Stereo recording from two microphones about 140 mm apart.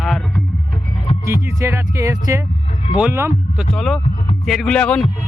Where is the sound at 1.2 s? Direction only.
20° right (ahead or behind).